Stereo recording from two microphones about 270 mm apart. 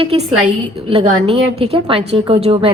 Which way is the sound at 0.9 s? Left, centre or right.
Centre.